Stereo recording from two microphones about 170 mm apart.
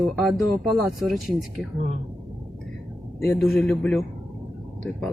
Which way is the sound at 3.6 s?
5° left (ahead or behind).